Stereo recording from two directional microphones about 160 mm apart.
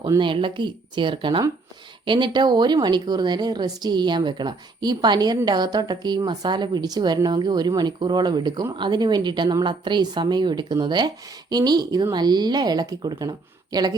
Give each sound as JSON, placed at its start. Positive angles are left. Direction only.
{"t": 0.2, "sound": "a woman's voice", "side_deg": -30}